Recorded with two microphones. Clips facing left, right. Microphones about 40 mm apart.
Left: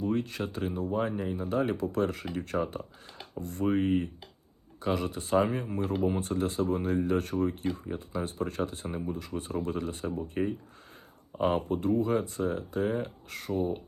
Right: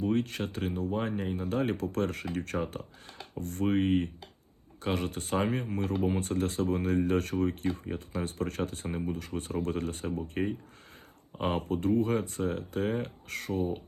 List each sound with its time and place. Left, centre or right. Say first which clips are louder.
0.0 s speech: right 1 dB; right
10.4 s speech: left 1 dB; right
11.4 s speech: left 2 dB; right